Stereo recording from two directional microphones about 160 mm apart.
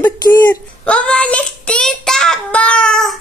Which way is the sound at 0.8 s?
5° left (ahead or behind).